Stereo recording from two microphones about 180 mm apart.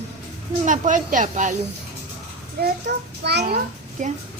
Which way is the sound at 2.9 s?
75° right (ahead or behind).